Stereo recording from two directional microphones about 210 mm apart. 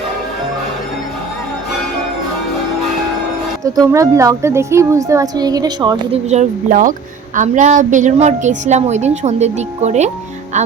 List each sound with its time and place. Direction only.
3.6 s speech: 15° right (ahead or behind)
6.2 s a woman's voice: 35° right (ahead or behind)